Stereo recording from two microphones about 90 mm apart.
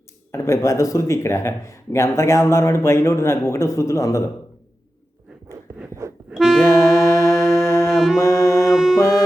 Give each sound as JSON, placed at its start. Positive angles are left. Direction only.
{"t": 0.3, "sound": "speech", "side_deg": 30}
{"t": 5.7, "sound": "a sound", "side_deg": -30}
{"t": 6.3, "sound": "music", "side_deg": -5}
{"t": 6.6, "sound": "music", "side_deg": 30}
{"t": 7.9, "sound": "music", "side_deg": -5}
{"t": 8.2, "sound": "music", "side_deg": 30}
{"t": 8.7, "sound": "music", "side_deg": -5}
{"t": 9.0, "sound": "music", "side_deg": 30}